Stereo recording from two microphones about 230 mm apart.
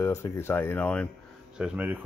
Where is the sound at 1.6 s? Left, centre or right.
Centre.